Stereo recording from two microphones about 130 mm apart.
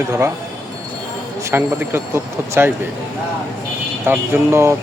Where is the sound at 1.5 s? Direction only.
15° right (ahead or behind).